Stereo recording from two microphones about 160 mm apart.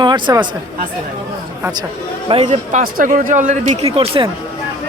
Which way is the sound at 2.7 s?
55° right (ahead or behind).